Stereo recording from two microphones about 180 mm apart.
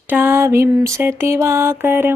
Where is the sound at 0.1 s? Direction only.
10° right (ahead or behind).